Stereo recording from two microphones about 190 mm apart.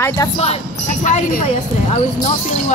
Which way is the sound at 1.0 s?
40° left (ahead or behind).